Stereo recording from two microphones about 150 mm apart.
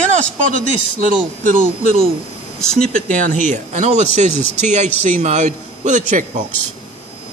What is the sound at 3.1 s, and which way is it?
Speech, 60° right (ahead or behind).